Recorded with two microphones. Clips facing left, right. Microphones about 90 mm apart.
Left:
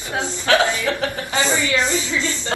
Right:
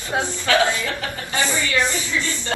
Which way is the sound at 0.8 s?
20° left (ahead or behind).